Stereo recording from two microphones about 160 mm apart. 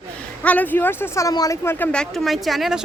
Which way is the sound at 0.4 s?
10° left (ahead or behind).